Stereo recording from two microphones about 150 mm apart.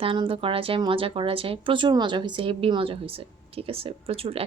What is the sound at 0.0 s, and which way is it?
Speech, 35° right (ahead or behind).